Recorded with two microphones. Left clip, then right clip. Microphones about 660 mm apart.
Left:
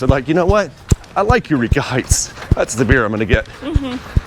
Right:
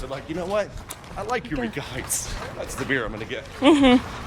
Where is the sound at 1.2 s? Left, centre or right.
Left.